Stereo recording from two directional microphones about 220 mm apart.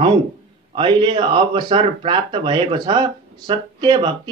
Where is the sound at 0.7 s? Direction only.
20° right (ahead or behind).